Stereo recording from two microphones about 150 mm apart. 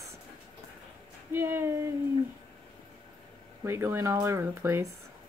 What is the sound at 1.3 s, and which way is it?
Speech, 15° right (ahead or behind).